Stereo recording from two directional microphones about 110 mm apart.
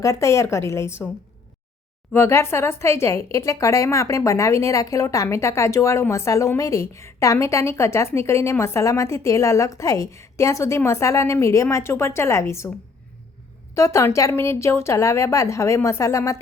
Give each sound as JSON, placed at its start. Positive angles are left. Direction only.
{"t": 0.0, "sound": "a woman's voice", "side_deg": 30}
{"t": 2.1, "sound": "a woman's voice", "side_deg": 20}
{"t": 13.7, "sound": "a woman's voice", "side_deg": 25}